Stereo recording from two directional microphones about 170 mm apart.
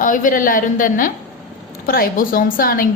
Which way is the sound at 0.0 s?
50° left (ahead or behind).